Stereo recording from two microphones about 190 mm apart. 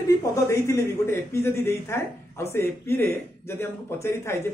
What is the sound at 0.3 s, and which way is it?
Speech, 15° left (ahead or behind).